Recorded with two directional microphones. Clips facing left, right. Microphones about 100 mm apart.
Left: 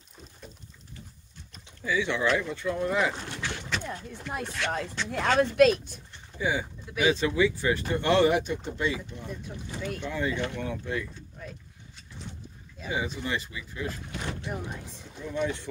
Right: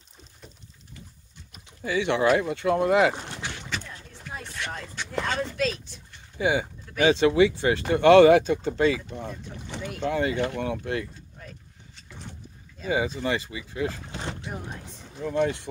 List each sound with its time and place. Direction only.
1.9 s speech: 65° right (ahead or behind); by 3.1 s 80° right
3.4 s a sound: 15° right (ahead or behind)
4.3 s chopping: 70° left (ahead or behind)
5.2 s speech: 70° left (ahead or behind)
6.3 s speech: 70° right (ahead or behind)
10.6 s speech: 65° right (ahead or behind)
12.9 s speech: 90° right
14.5 s speech: centre (ahead or behind)
15.1 s speech: 60° right (ahead or behind)